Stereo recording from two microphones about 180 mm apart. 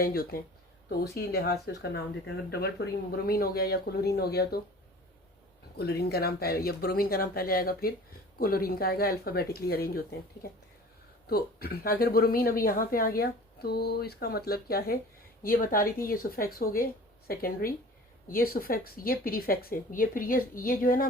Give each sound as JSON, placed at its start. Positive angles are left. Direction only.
{"t": 0.0, "sound": "speech", "side_deg": 55}
{"t": 5.7, "sound": "speech", "side_deg": 65}